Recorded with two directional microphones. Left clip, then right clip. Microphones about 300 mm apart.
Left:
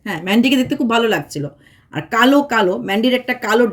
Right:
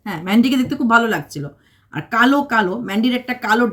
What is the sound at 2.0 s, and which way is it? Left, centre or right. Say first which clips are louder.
Speech: left 2 dB; right.